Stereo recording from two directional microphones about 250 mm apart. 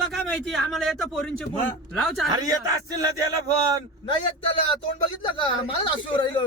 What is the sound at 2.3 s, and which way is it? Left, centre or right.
Speech, centre.